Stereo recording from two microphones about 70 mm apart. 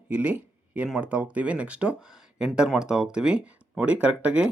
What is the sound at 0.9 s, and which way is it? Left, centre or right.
Speech, centre.